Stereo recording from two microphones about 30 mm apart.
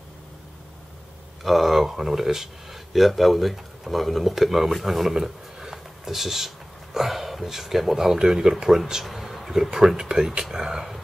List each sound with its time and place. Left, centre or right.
1.4 s speech: centre; by 8.6 s right
9.0 s a sound: centre
9.9 s speech: right